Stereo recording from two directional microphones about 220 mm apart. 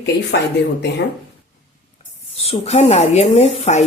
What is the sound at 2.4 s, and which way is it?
Speech, 30° left (ahead or behind).